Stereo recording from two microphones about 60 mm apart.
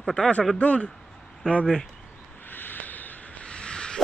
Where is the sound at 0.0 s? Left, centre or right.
Centre.